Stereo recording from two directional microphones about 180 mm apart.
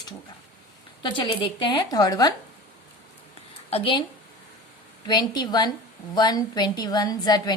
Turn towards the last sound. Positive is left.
turn(degrees=20)  # may be behind; listen again after turning